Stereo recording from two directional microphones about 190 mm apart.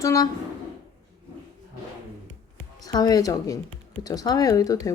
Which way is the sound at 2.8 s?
20° left (ahead or behind).